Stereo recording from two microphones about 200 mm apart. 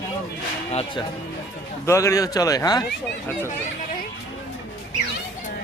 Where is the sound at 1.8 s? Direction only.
15° left (ahead or behind).